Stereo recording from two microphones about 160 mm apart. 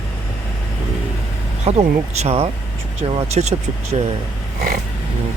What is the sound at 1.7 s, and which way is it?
Speech, 40° right (ahead or behind).